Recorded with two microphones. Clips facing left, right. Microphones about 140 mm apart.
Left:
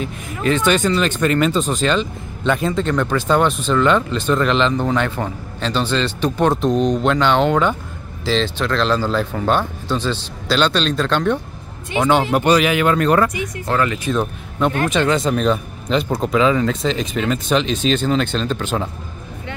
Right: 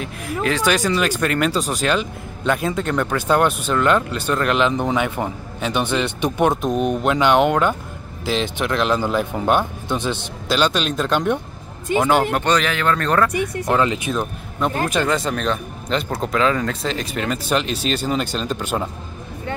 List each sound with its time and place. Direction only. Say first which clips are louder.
0.0 s speech: left 1 dB; centre (ahead or behind)
13.7 s speech: left 1 dB; 20° right (ahead or behind)
14.9 s speech: left 3 dB; 5° right (ahead or behind)